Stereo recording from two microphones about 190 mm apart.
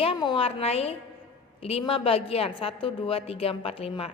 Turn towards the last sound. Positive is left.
turn(degrees=30)  # may be behind; listen again after turning